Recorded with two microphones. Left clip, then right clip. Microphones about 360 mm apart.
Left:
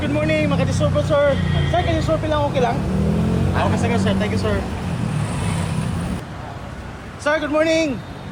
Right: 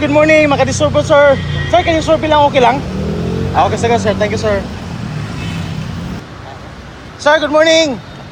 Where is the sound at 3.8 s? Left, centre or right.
Centre.